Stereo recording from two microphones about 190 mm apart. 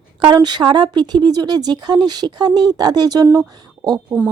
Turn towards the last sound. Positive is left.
turn(degrees=-20)  # may be behind; listen again after turning